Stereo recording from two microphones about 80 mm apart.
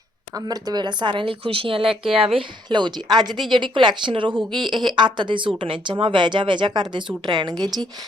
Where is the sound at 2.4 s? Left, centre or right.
Right.